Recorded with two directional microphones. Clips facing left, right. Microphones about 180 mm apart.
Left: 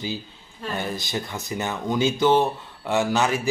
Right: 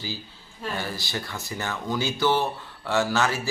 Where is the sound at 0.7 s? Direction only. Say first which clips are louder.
Left 5 dB; 20° left (ahead or behind).